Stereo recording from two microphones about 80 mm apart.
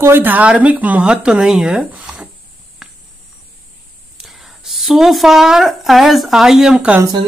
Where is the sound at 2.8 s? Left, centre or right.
Centre.